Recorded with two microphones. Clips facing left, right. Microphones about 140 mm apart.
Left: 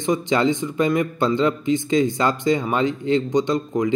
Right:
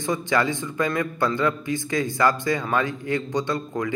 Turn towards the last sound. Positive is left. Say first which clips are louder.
# left 5 dB
turn(degrees=20)  # may be behind; listen again after turning